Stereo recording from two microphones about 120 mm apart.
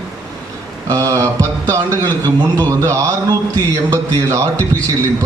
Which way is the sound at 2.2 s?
30° right (ahead or behind).